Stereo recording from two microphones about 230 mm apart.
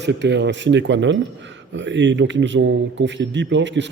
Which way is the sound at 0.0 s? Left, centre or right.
Right.